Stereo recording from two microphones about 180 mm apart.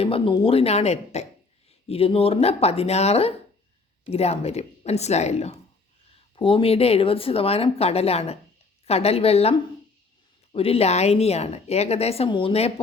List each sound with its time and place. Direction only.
0.0 s a woman's voice: 30° left (ahead or behind)